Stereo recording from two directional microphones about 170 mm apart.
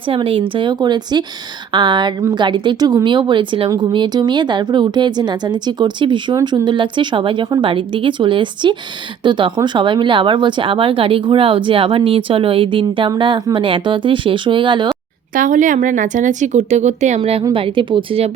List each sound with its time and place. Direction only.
0.1 s a woman's voice: 30° right (ahead or behind)
15.4 s a woman's voice: 50° right (ahead or behind); by 18.3 s 30° right (ahead or behind)